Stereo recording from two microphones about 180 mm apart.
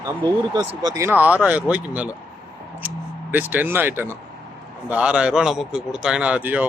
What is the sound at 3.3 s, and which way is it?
A man's voice, 10° right (ahead or behind).